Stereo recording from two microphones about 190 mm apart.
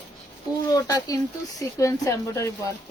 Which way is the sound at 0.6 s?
20° left (ahead or behind).